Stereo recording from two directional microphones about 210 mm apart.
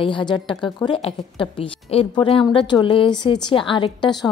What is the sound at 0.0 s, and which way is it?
A woman's voice, 20° left (ahead or behind).